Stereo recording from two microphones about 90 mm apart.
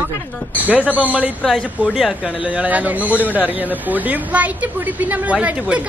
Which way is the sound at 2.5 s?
15° right (ahead or behind).